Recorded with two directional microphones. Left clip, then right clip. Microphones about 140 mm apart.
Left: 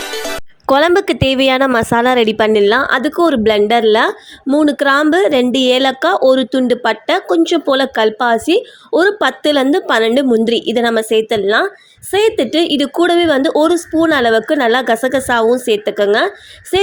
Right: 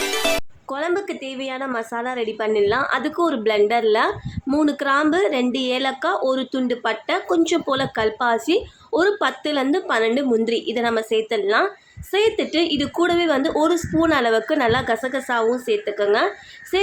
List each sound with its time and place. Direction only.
0.7 s a woman's voice: 75° left (ahead or behind); by 7.3 s 50° left (ahead or behind)
7.3 s a woman's voice: 35° left (ahead or behind)